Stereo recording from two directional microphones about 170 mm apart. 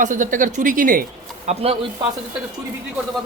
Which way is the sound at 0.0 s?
50° right (ahead or behind).